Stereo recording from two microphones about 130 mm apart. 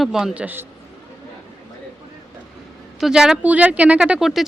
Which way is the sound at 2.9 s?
5° right (ahead or behind).